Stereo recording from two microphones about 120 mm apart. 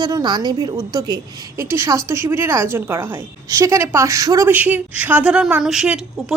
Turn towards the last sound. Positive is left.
turn(degrees=-5)  # may be behind; listen again after turning